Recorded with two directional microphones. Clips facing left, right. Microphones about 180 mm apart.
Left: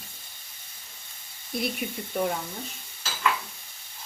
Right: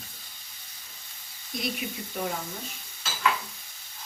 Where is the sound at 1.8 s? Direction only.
50° left (ahead or behind).